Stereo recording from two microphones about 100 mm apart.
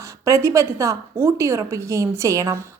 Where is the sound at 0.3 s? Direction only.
35° right (ahead or behind).